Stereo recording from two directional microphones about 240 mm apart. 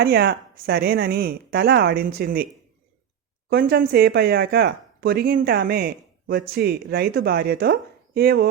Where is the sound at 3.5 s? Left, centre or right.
Right.